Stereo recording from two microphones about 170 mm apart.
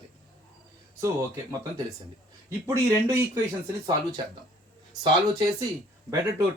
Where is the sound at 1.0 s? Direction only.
20° right (ahead or behind).